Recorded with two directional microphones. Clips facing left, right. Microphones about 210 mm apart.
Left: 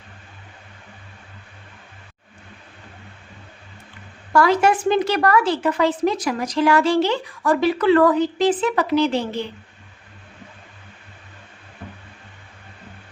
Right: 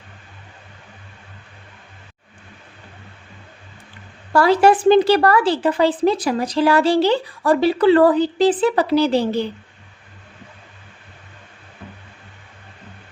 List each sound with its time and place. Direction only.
4.3 s a woman's voice: 30° right (ahead or behind)